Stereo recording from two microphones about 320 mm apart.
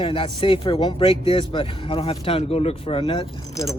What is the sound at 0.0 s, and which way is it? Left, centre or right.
Speech, centre.